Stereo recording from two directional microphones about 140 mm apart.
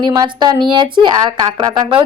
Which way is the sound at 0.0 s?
30° right (ahead or behind).